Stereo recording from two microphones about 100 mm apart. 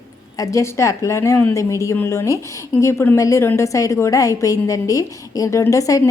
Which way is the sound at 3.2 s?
30° left (ahead or behind).